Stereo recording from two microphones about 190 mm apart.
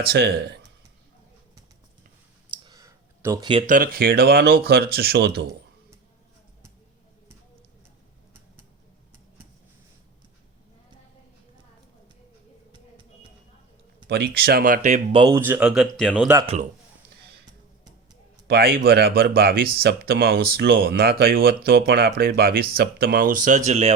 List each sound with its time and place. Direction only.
0.0 s speech: 55° right (ahead or behind)
2.6 s a sound: 15° right (ahead or behind)
3.7 s speech: 50° right (ahead or behind)
14.1 s speech: 55° right (ahead or behind); by 15.0 s 40° right (ahead or behind)
15.1 s speech: 25° right (ahead or behind)
15.4 s speech: 10° right (ahead or behind)
18.4 s speech: 55° right (ahead or behind); by 23.9 s 35° right (ahead or behind)